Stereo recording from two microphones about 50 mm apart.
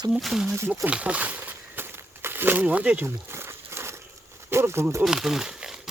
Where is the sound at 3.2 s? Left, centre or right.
Right.